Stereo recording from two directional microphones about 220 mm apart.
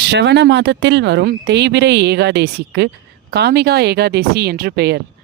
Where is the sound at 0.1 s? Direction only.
50° right (ahead or behind).